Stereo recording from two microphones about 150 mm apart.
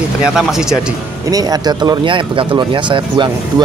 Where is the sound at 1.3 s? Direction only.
25° right (ahead or behind).